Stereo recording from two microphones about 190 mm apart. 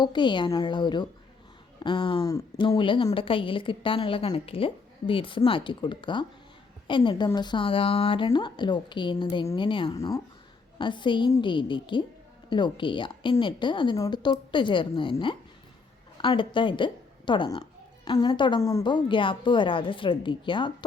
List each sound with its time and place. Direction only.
0.0 s a woman's voice: 25° left (ahead or behind)